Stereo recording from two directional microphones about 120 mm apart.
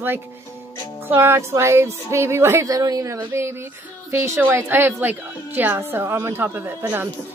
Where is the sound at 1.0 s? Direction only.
20° right (ahead or behind).